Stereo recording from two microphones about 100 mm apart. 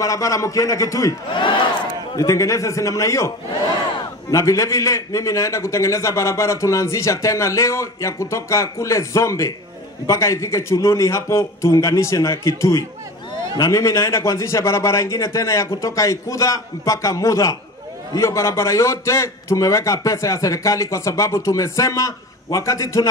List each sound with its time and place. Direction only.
0.0 s a man's voice: 35° left (ahead or behind)
1.3 s speech: 55° left (ahead or behind)
2.1 s a man's voice: 30° left (ahead or behind)